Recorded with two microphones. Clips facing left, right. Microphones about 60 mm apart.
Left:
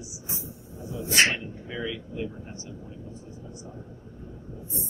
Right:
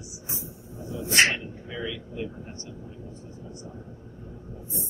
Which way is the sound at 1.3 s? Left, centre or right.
Centre.